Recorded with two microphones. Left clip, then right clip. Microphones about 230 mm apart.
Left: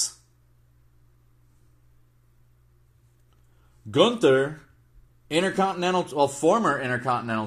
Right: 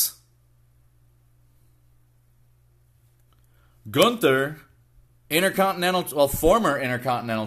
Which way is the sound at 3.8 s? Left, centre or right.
Right.